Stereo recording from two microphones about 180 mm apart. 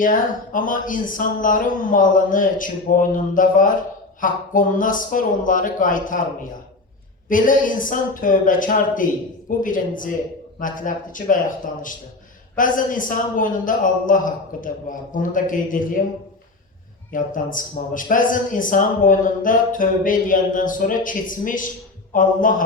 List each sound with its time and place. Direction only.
0.0 s a man's voice: 50° left (ahead or behind)
17.1 s a man's voice: 50° left (ahead or behind)